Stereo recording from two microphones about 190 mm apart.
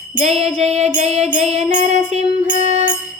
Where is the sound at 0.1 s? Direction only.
35° right (ahead or behind).